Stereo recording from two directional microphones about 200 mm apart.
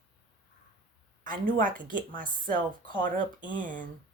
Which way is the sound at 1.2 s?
40° right (ahead or behind).